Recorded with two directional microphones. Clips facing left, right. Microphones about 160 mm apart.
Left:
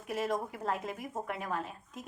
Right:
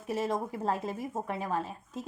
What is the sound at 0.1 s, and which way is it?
A woman's voice, 30° right (ahead or behind).